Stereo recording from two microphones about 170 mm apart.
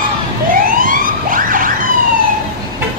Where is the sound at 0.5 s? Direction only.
55° right (ahead or behind).